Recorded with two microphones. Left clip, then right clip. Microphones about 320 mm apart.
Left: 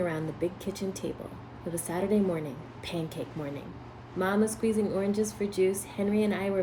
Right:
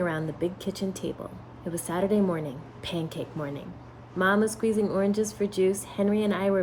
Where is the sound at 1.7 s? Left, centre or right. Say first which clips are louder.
Right 3 dB; centre.